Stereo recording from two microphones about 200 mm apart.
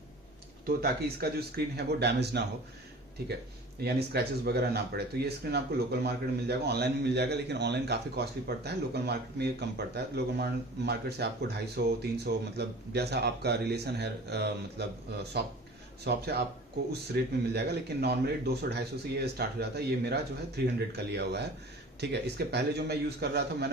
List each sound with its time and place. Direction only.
0.7 s a man's voice: 50° right (ahead or behind)
3.8 s a man's voice: 55° right (ahead or behind)